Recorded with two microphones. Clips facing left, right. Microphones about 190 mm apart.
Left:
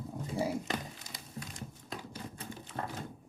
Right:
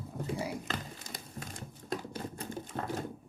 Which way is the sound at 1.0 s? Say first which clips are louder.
Right 1 dB; 50° right (ahead or behind).